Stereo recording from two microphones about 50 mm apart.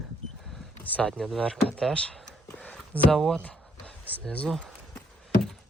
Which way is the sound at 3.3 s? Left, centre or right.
Left.